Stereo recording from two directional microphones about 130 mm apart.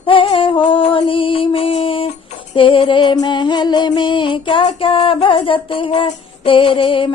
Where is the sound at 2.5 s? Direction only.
40° left (ahead or behind).